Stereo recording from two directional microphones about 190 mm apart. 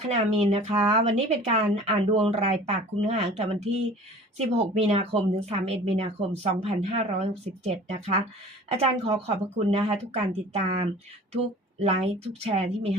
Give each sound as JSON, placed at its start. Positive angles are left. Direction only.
{"t": 0.1, "sound": "speech", "side_deg": -35}